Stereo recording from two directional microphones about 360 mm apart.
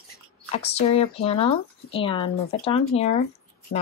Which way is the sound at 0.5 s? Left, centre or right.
Centre.